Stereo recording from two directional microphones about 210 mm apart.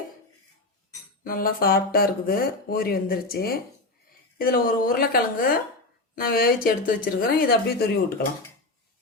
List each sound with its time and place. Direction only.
1.2 s speech: 45° left (ahead or behind)